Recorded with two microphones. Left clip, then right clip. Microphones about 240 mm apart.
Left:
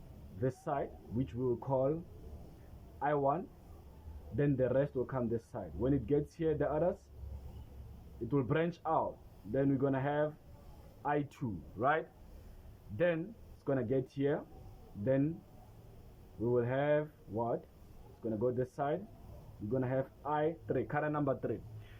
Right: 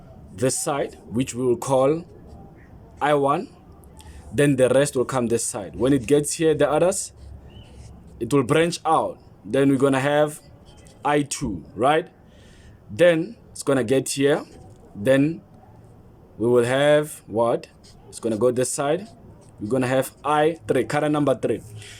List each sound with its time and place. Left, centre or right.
0.3 s speech: right
1.5 s speech: right
3.0 s speech: right
8.3 s speech: right; by 12.0 s centre
13.7 s speech: right
16.4 s speech: right; by 21.6 s centre